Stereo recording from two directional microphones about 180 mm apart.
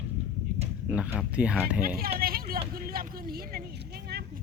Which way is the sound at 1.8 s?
55° right (ahead or behind).